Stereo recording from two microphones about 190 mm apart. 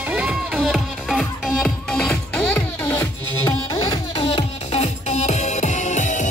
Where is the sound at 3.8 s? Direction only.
25° left (ahead or behind).